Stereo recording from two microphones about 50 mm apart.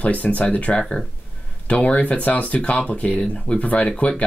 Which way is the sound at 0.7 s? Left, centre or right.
Centre.